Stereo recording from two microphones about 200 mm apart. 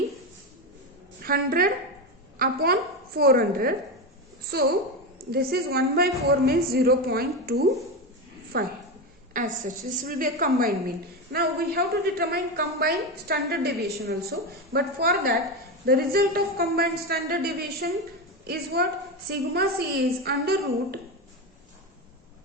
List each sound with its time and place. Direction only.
1.2 s a woman's voice: 45° right (ahead or behind)
5.3 s a woman's voice: 50° right (ahead or behind)